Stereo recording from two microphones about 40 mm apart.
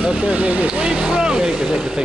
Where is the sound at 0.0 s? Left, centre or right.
Right.